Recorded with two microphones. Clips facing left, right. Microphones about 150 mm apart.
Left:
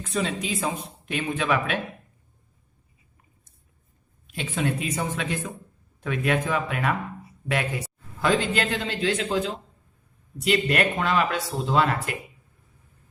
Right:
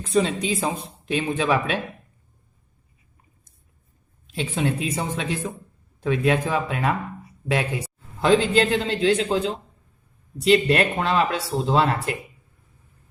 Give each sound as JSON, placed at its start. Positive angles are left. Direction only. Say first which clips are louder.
{"t": 0.0, "sound": "a woman's voice", "louder": "right 6 dB", "side_deg": -30}
{"t": 4.3, "sound": "a woman's voice", "louder": "right 2 dB", "side_deg": -30}